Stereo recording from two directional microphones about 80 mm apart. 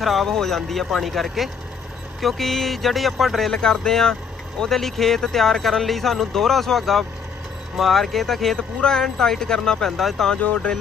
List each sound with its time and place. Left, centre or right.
0.0 s speech: centre